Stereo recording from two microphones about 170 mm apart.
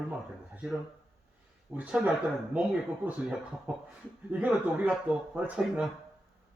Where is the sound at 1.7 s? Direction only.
5° right (ahead or behind).